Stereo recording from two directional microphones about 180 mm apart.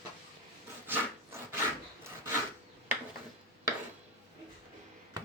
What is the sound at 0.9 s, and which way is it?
Dog, 15° right (ahead or behind).